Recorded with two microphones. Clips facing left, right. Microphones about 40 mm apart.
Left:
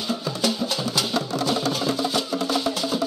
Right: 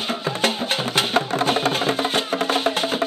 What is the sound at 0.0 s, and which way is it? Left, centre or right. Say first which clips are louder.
Music: right 3 dB; right.